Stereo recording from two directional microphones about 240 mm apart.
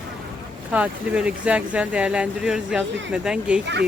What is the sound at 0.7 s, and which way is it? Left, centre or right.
Speech, centre.